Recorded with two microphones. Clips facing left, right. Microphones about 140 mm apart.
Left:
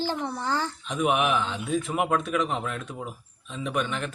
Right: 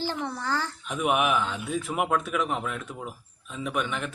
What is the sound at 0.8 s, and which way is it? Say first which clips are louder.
Speech: even; 10° right (ahead or behind).